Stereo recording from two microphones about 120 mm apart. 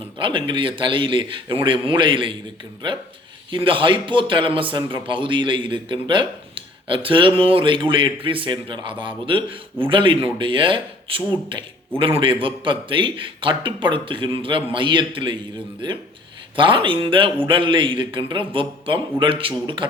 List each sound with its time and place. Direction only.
0.2 s speech: 45° right (ahead or behind)
3.5 s speech: 45° right (ahead or behind)